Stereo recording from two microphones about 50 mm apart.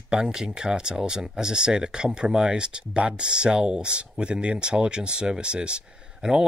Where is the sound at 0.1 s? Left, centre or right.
Centre.